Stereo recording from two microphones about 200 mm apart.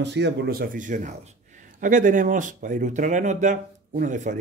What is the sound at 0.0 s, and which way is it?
A man's voice, 60° right (ahead or behind).